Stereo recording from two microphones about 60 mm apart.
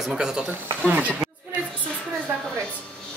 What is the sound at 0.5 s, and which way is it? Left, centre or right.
Speech, right.